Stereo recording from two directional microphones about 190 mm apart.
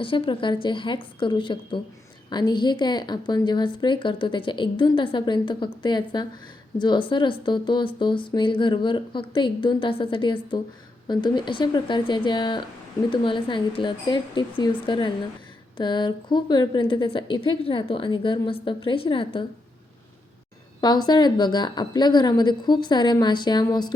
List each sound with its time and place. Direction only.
0.0 s a woman's voice: 25° left (ahead or behind)
20.8 s a woman's voice: 20° left (ahead or behind)